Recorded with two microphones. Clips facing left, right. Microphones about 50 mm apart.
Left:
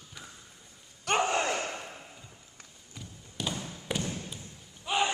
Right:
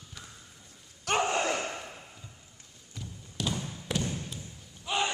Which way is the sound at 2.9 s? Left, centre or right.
Centre.